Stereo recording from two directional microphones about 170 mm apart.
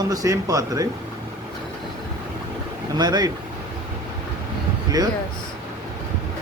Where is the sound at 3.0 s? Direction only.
25° right (ahead or behind).